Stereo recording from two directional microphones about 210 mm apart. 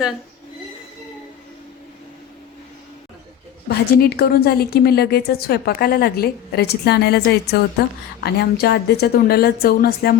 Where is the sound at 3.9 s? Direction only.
50° left (ahead or behind).